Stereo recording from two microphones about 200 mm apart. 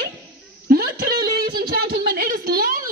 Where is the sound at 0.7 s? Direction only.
50° right (ahead or behind).